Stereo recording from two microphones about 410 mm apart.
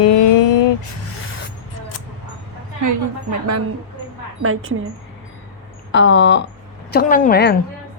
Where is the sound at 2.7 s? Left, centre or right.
Right.